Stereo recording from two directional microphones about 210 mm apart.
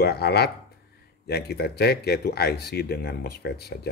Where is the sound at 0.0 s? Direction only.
50° left (ahead or behind).